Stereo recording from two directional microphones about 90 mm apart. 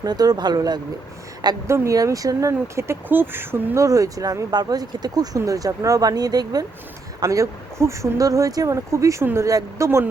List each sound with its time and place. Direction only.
0.0 s speech: 45° right (ahead or behind)
1.6 s speech: 30° right (ahead or behind)
3.8 s speech: 40° right (ahead or behind)